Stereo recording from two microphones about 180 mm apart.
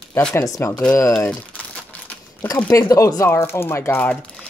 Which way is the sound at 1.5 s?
5° left (ahead or behind).